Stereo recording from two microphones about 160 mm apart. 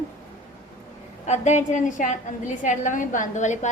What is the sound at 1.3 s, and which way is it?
A woman's voice, 50° left (ahead or behind).